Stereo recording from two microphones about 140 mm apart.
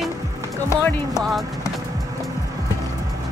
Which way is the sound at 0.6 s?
20° left (ahead or behind).